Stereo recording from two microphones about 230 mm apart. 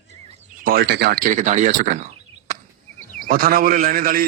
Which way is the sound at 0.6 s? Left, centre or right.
Right.